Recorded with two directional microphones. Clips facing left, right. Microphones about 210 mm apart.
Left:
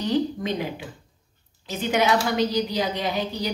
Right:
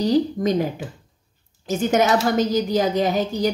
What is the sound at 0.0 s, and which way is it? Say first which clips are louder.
A woman's voice: right 5 dB; 40° right (ahead or behind).